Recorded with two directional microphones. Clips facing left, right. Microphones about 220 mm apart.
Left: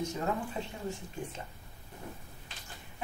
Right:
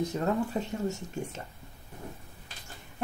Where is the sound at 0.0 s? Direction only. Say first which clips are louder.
Right 5 dB; 40° right (ahead or behind).